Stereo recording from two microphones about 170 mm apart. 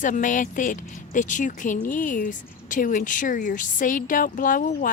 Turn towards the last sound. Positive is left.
turn(degrees=55)  # may be behind; listen again after turning